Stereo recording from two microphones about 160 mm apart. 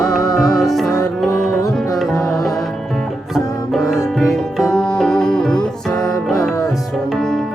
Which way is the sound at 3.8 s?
Centre (ahead or behind).